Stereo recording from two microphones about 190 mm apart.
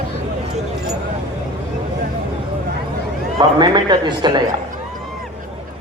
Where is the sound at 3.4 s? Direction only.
20° right (ahead or behind).